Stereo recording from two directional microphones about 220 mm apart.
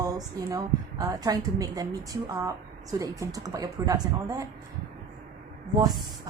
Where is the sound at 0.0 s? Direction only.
15° right (ahead or behind).